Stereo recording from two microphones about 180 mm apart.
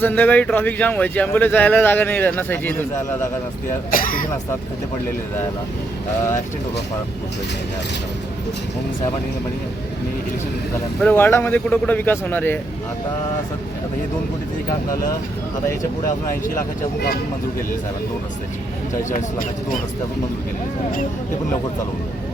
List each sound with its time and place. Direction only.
0.0 s speech: 10° left (ahead or behind)
3.9 s speech: 50° left (ahead or behind)
11.0 s speech: 10° left (ahead or behind)